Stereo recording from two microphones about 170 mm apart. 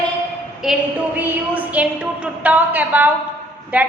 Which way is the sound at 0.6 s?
5° right (ahead or behind).